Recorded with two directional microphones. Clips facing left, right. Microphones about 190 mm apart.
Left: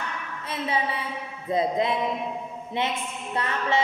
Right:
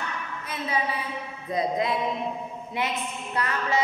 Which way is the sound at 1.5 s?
25° left (ahead or behind).